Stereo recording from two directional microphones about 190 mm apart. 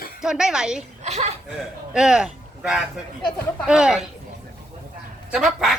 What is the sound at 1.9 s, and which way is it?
Speech, 5° right (ahead or behind).